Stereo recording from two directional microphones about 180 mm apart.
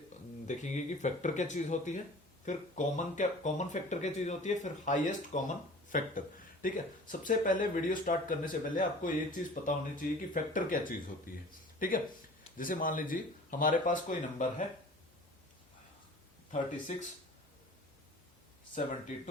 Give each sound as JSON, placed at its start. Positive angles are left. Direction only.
{"t": 0.4, "sound": "speech", "side_deg": 40}
{"t": 18.7, "sound": "speech", "side_deg": 45}